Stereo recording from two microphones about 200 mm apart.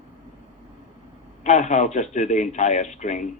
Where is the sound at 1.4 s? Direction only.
35° left (ahead or behind).